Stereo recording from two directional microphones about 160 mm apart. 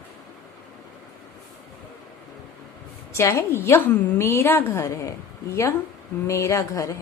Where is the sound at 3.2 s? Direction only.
15° left (ahead or behind).